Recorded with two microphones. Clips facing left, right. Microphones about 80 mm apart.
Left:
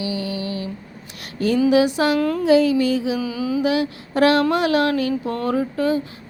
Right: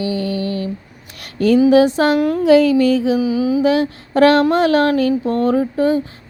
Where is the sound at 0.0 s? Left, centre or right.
Right.